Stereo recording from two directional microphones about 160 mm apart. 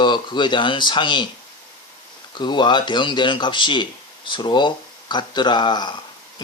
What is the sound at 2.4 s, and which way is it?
Speech, 30° left (ahead or behind).